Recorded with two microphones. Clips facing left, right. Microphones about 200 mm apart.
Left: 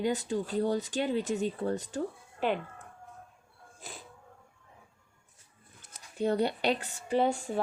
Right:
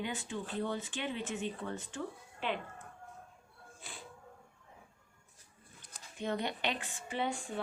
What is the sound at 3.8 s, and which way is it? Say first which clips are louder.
Dog: left 5 dB; 40° left (ahead or behind).